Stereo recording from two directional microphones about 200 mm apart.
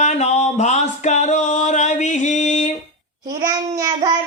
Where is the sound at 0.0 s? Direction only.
35° left (ahead or behind).